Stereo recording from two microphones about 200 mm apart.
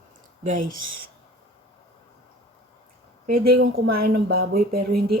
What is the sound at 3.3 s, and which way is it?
Speech, 45° right (ahead or behind).